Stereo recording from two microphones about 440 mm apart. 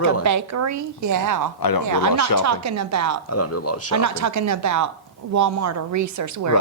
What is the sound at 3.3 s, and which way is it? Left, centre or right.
Speech, left.